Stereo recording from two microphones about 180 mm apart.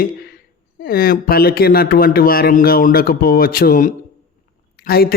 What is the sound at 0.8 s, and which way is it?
Speech, 55° left (ahead or behind).